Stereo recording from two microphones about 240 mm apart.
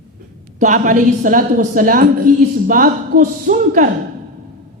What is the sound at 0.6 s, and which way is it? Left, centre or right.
A woman's voice, right.